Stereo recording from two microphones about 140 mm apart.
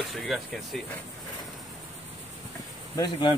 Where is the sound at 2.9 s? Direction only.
30° left (ahead or behind).